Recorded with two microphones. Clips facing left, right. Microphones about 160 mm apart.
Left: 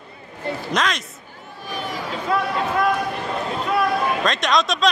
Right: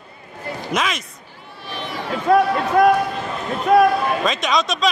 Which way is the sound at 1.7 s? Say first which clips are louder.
Even; 40° left (ahead or behind).